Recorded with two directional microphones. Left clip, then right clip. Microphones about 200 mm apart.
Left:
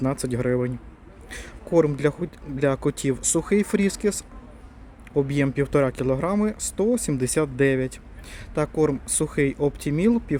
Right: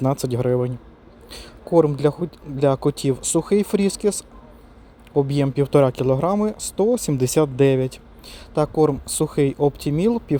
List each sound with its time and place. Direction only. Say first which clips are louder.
0.0 s speech: right 4 dB; 20° right (ahead or behind)